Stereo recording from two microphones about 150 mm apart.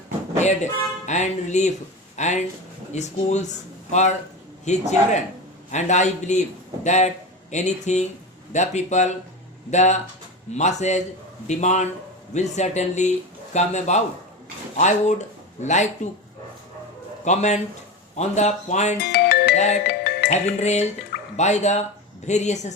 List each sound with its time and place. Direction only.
0.4 s speech: 50° left (ahead or behind)
4.6 s speech: 50° left (ahead or behind)
17.2 s speech: 50° left (ahead or behind)
19.1 s music: 90° left
19.5 s speech: 50° left (ahead or behind)
19.9 s music: 90° left
20.6 s speech: 50° left (ahead or behind)